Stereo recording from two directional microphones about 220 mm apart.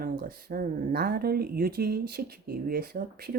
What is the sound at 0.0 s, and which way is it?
A woman's voice, 45° right (ahead or behind).